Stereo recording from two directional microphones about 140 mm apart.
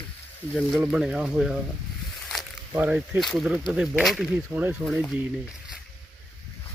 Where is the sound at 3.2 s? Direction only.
Centre (ahead or behind).